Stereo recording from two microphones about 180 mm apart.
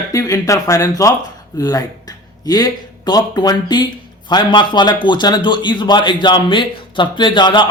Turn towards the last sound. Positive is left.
turn(degrees=25)  # may be behind; listen again after turning